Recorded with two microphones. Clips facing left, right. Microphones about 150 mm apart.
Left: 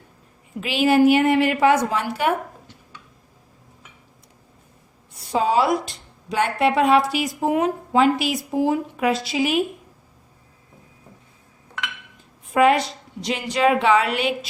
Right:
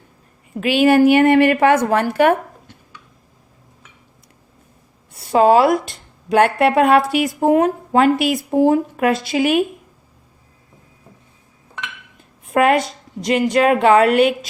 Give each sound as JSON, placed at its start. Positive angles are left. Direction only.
{"t": 0.6, "sound": "speech", "side_deg": -65}
{"t": 5.3, "sound": "speech", "side_deg": -60}
{"t": 12.5, "sound": "a woman's voice", "side_deg": -55}